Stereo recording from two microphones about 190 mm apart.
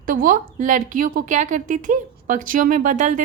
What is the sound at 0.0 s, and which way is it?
A woman's voice, 45° right (ahead or behind).